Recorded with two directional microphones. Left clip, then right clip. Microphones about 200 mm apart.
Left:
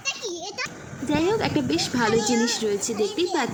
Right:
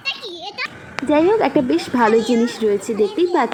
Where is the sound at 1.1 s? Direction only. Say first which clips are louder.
Right 8 dB; centre (ahead or behind).